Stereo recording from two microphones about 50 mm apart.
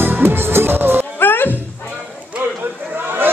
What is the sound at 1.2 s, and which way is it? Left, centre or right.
Music, left.